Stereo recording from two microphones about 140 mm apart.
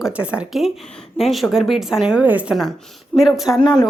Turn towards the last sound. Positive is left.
turn(degrees=30)  # may be behind; listen again after turning